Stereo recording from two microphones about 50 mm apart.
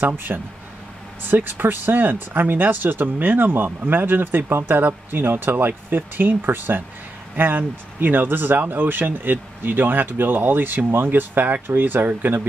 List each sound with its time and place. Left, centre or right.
0.0 s speech: right